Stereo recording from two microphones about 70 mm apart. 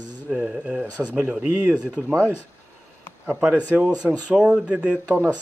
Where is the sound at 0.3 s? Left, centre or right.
Centre.